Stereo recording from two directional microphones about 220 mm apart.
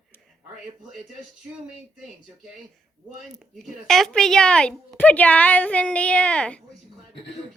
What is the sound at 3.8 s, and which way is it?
A woman's voice, centre (ahead or behind).